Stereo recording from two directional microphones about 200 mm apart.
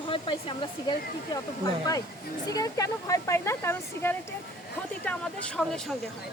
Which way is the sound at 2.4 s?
20° left (ahead or behind).